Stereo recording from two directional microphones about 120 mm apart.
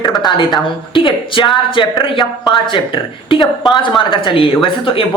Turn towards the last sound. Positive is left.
turn(degrees=45)  # may be behind; listen again after turning